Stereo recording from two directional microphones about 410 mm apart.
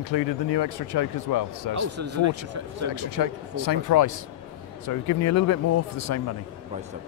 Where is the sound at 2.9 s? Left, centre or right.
Left.